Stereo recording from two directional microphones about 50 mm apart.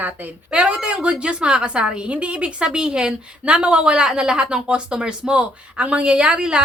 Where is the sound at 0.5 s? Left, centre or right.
Centre.